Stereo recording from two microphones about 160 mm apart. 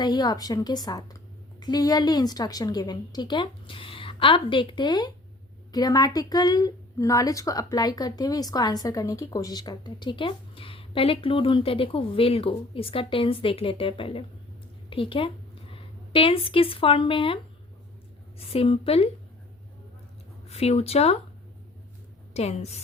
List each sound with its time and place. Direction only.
0.0 s a woman's voice: 25° left (ahead or behind)
20.5 s a woman's voice: 40° left (ahead or behind)
22.3 s a woman's voice: 40° left (ahead or behind)